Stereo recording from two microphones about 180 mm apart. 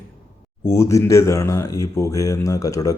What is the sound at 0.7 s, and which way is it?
Speech, 15° left (ahead or behind).